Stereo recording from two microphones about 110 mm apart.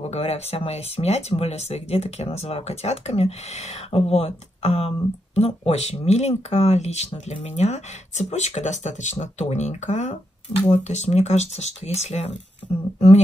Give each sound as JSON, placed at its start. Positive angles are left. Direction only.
{"t": 0.0, "sound": "speech", "side_deg": 70}